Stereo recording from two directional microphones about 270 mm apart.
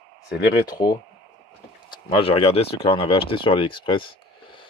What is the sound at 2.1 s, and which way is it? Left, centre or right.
Speech, left.